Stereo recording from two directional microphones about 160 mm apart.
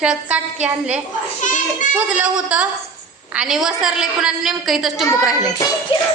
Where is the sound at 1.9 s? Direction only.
10° right (ahead or behind).